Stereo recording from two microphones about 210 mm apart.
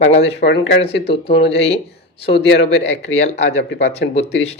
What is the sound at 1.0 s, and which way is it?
Speech, 25° left (ahead or behind).